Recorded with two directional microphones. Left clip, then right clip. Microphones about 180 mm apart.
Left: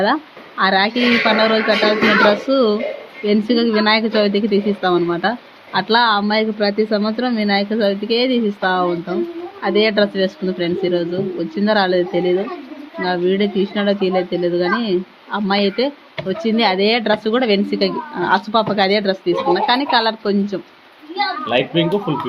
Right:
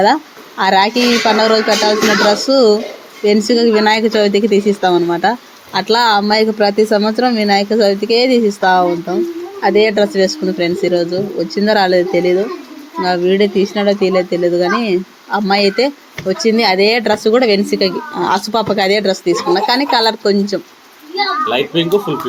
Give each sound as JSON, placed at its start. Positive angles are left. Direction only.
{"t": 0.0, "sound": "speech", "side_deg": -10}
{"t": 21.4, "sound": "a child's voice", "side_deg": 25}